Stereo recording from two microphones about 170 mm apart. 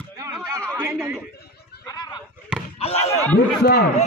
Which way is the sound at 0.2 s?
20° right (ahead or behind).